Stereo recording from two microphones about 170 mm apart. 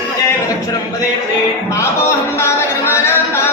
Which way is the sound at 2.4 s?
15° left (ahead or behind).